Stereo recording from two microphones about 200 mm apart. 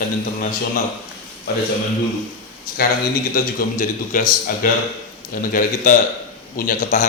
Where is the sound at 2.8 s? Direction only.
50° left (ahead or behind).